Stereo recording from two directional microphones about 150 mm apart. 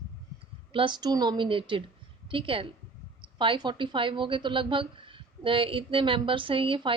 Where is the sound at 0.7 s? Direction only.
35° right (ahead or behind).